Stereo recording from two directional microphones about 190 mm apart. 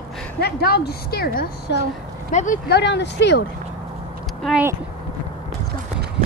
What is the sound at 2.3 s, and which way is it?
Speech, 40° left (ahead or behind).